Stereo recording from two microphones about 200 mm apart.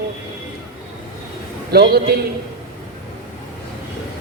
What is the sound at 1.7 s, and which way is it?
Speech, 55° right (ahead or behind).